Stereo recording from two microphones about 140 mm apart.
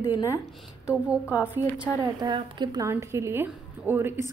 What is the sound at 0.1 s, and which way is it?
Speech, 25° left (ahead or behind).